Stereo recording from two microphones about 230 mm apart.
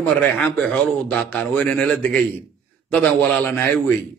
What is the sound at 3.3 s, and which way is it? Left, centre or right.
Speech, centre.